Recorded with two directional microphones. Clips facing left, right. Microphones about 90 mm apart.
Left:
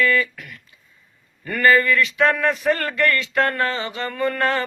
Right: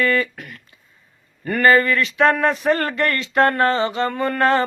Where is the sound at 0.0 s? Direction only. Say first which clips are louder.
Even; 40° right (ahead or behind).